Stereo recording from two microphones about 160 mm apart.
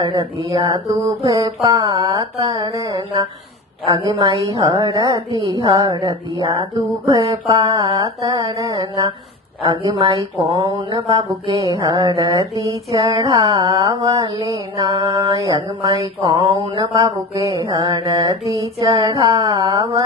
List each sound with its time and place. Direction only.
0.0 s speech: 20° right (ahead or behind)
10.8 s a sound: 30° right (ahead or behind)
11.5 s speech: 20° right (ahead or behind)